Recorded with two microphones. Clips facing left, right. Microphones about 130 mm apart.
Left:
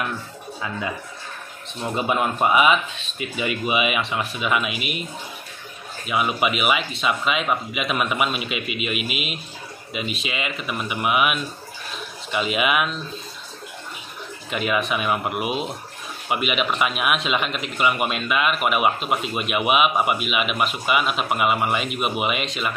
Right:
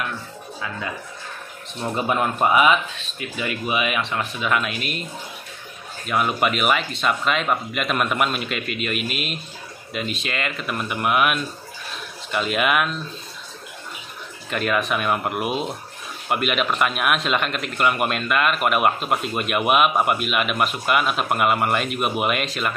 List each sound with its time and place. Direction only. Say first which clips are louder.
2.0 s speech: even; 15° left (ahead or behind)
6.0 s a man's voice: right 1 dB; 5° left (ahead or behind)
14.5 s a man's voice: right 1 dB; 5° left (ahead or behind)